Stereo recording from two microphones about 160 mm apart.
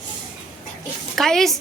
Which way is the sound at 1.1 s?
Centre (ahead or behind).